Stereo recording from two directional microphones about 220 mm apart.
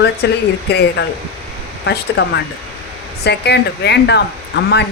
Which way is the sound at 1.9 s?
50° left (ahead or behind).